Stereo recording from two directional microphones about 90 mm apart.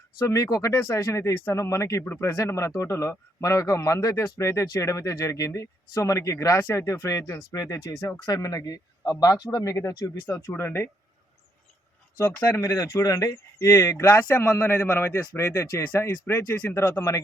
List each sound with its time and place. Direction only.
0.2 s speech: 35° left (ahead or behind)
8.2 s a man's voice: 45° left (ahead or behind); by 10.8 s 25° left (ahead or behind)
12.2 s speech: 20° left (ahead or behind)
12.5 s speech: 35° left (ahead or behind)
13.7 s speech: 30° left (ahead or behind)